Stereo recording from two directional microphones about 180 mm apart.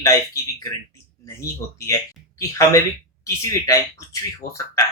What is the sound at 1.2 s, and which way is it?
Speech, 15° left (ahead or behind).